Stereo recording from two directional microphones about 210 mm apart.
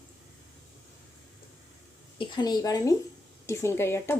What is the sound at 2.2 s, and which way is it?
A woman's voice, 20° left (ahead or behind).